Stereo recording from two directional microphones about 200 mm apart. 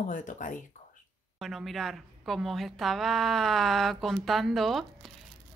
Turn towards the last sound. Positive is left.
turn(degrees=0)  # may be behind; listen again after turning